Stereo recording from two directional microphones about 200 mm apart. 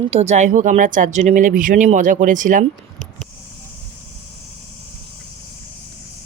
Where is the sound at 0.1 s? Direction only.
35° right (ahead or behind).